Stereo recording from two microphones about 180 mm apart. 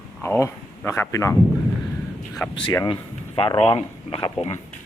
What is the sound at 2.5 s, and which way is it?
A man's voice, 25° left (ahead or behind).